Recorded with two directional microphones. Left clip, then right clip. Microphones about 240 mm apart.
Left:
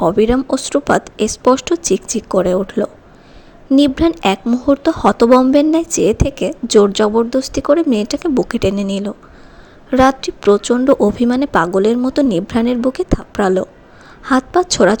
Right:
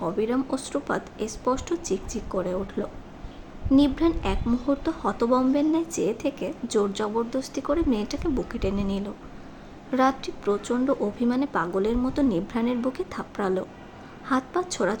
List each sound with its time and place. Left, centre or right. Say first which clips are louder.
0.0 s a woman's voice: left 13 dB; left